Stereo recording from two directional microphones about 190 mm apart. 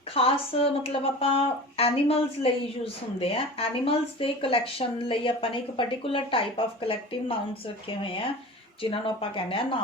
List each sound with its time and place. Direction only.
0.1 s speech: 30° left (ahead or behind)